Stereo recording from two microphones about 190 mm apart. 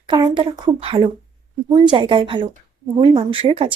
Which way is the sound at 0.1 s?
25° right (ahead or behind).